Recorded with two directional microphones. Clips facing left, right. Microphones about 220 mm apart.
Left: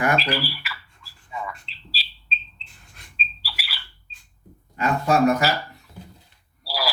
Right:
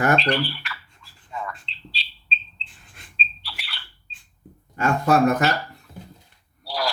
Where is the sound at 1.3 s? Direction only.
Centre (ahead or behind).